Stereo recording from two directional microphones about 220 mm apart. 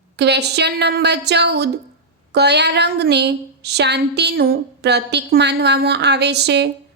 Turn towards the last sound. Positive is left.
turn(degrees=-50)  # may be behind; listen again after turning